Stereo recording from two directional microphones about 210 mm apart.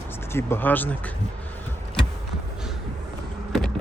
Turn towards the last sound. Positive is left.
turn(degrees=0)  # may be behind; listen again after turning